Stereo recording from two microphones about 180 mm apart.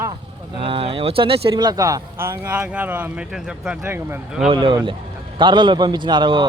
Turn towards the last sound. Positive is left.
turn(degrees=-25)  # may be behind; listen again after turning